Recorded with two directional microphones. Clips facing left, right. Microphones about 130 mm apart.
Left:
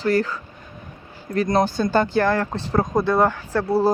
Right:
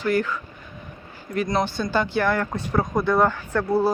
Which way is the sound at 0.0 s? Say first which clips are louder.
Left 2 dB; 35° left (ahead or behind).